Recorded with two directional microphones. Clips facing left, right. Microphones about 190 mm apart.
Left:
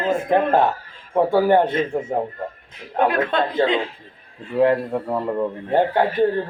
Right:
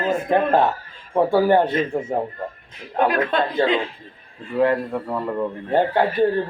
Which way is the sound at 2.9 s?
20° left (ahead or behind).